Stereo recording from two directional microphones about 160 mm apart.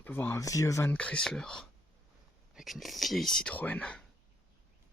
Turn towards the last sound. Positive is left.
turn(degrees=5)  # may be behind; listen again after turning